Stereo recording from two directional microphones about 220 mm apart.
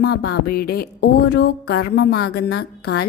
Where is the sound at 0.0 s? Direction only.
45° left (ahead or behind).